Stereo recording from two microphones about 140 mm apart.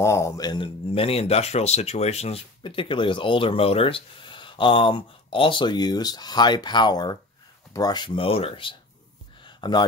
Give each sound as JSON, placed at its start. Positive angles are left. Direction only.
{"t": 0.0, "sound": "speech", "side_deg": 20}